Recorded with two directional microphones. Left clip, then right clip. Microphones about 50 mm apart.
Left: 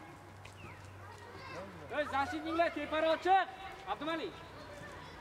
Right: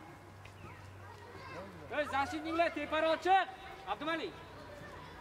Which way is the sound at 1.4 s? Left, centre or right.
Left.